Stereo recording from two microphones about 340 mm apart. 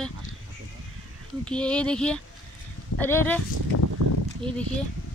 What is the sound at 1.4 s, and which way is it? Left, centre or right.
Speech, centre.